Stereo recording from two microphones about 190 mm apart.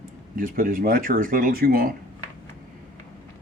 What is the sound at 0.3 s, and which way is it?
Speech, 45° right (ahead or behind).